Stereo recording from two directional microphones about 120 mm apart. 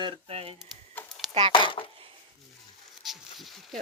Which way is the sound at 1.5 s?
45° left (ahead or behind).